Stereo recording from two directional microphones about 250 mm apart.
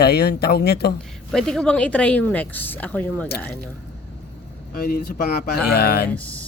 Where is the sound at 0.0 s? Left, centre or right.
Left.